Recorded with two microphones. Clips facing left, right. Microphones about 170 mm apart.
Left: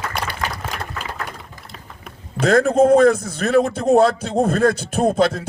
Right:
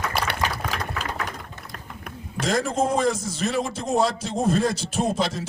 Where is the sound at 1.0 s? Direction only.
5° left (ahead or behind).